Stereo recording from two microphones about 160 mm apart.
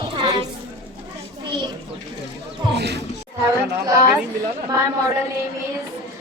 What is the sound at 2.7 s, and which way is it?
Speech, 90° right.